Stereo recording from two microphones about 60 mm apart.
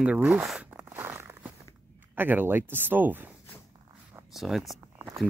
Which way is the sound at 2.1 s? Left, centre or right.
Right.